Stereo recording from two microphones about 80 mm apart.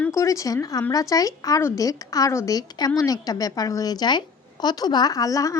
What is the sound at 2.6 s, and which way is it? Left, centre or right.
Speech, left.